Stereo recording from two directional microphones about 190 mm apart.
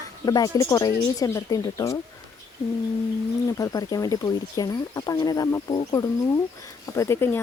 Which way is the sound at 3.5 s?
20° left (ahead or behind).